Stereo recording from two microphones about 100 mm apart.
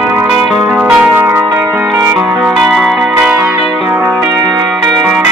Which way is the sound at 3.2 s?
20° right (ahead or behind).